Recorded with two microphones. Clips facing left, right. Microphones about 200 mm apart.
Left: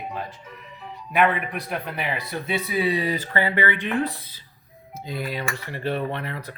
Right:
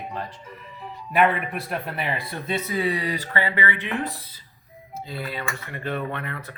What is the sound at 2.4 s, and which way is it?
Speech, 10° left (ahead or behind).